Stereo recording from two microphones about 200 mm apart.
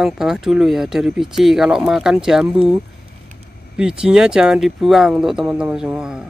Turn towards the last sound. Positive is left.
turn(degrees=-5)  # may be behind; listen again after turning